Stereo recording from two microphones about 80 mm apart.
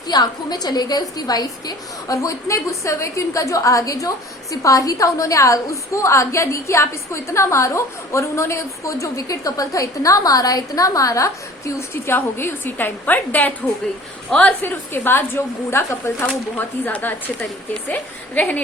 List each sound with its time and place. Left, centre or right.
0.1 s a woman's voice: left; by 18.6 s centre